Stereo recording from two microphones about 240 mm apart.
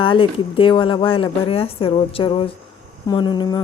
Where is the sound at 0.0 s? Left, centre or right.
Left.